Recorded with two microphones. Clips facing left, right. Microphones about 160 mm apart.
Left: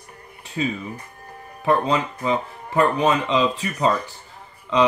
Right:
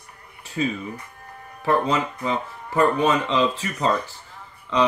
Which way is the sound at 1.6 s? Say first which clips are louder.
Left 1 dB; 15° left (ahead or behind).